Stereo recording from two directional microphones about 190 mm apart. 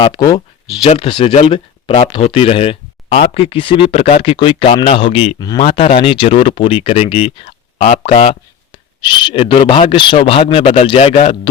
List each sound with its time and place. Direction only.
0.0 s speech: 20° left (ahead or behind)